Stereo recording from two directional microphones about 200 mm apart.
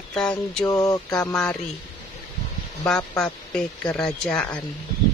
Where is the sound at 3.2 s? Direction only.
5° left (ahead or behind).